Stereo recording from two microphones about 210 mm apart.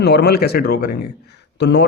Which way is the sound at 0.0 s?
50° left (ahead or behind).